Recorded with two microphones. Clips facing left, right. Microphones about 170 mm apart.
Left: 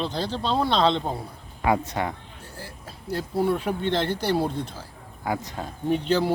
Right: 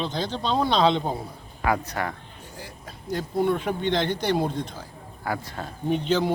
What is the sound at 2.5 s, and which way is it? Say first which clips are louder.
Speech: even; 5° left (ahead or behind).